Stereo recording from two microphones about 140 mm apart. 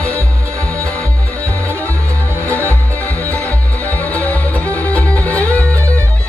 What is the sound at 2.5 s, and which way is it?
Music, 10° left (ahead or behind).